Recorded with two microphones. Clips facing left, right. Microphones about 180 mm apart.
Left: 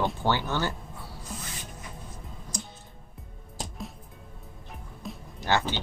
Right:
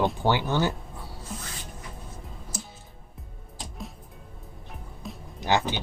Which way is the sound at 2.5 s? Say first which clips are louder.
Left 1 dB; 5° right (ahead or behind).